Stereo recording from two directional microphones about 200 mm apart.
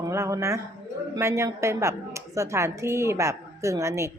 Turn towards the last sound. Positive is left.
turn(degrees=-15)  # may be behind; listen again after turning